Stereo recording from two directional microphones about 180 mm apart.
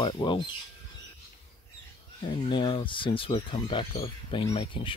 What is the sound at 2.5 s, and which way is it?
Speech, 25° left (ahead or behind).